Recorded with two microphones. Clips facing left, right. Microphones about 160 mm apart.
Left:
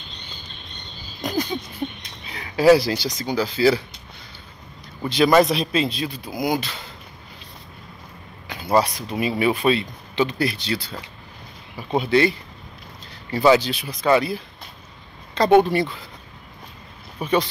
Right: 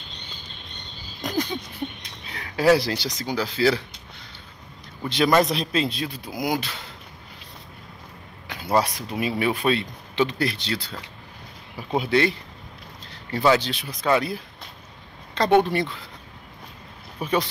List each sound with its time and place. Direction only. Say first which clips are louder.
1.2 s a sound: left 2 dB; 5° left (ahead or behind)
1.8 s a sound: left 3 dB; 35° left (ahead or behind)
2.2 s speech: left 4 dB; 5° left (ahead or behind)
5.0 s speech: left 3 dB; 5° left (ahead or behind)
8.5 s speech: left 3 dB; centre (ahead or behind)
17.2 s speech: left 3 dB; centre (ahead or behind)